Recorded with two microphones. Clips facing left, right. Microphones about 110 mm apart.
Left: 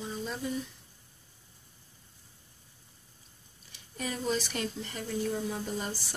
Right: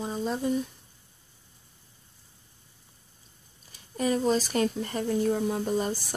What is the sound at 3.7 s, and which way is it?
Speech, 40° right (ahead or behind).